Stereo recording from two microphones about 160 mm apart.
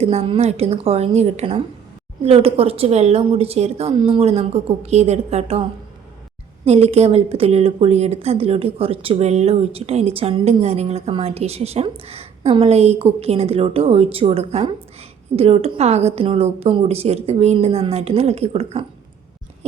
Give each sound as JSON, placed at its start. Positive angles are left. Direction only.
{"t": 0.0, "sound": "a woman's voice", "side_deg": -40}
{"t": 6.7, "sound": "a woman's voice", "side_deg": -40}